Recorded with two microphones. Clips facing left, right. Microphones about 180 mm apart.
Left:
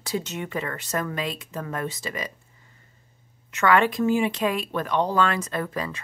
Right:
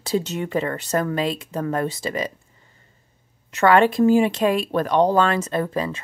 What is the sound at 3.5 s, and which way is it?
Speech, 35° right (ahead or behind).